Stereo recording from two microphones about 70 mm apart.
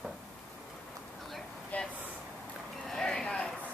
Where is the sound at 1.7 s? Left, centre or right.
Left.